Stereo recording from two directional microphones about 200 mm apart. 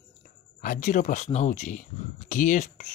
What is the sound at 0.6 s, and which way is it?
Speech, 40° left (ahead or behind).